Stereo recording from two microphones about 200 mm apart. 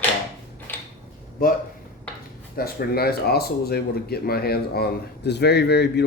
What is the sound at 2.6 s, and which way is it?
Speech, 50° left (ahead or behind).